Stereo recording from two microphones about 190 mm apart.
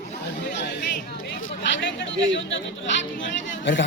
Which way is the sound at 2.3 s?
75° left (ahead or behind).